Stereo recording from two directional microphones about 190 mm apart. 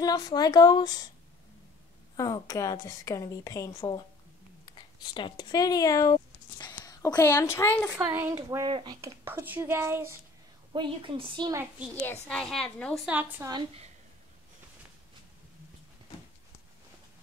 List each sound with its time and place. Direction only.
0.0 s speech: 20° left (ahead or behind)
2.1 s a woman's voice: 20° left (ahead or behind)
7.9 s speech: 10° right (ahead or behind)
10.7 s a woman's voice: 25° right (ahead or behind)
11.9 s a woman's voice: 10° left (ahead or behind)
13.0 s speech: 10° right (ahead or behind)
13.5 s a woman's voice: 25° right (ahead or behind)